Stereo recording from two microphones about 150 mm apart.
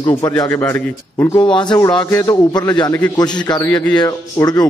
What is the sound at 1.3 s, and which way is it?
Speech, 30° left (ahead or behind).